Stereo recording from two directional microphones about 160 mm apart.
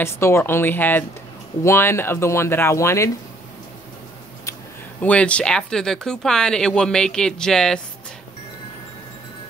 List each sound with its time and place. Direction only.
0.0 s speech: 15° left (ahead or behind)
5.0 s speech: 10° left (ahead or behind)